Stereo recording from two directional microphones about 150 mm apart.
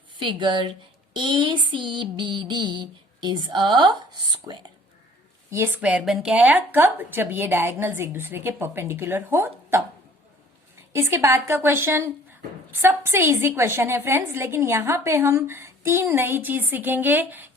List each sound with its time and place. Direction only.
0.2 s a sound: 30° right (ahead or behind)
5.5 s a woman's voice: 15° right (ahead or behind)
10.9 s a woman's voice: 20° right (ahead or behind)